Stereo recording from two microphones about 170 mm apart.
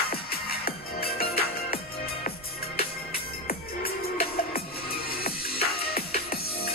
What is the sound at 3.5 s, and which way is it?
Music, 60° left (ahead or behind).